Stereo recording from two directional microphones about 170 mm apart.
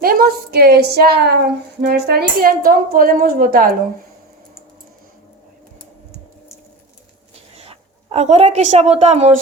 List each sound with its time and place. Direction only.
0.0 s a woman's voice: 60° right (ahead or behind)
7.5 s a woman's voice: 35° right (ahead or behind)